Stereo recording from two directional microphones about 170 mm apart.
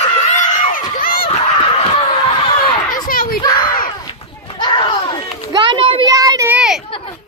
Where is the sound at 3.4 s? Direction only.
25° left (ahead or behind).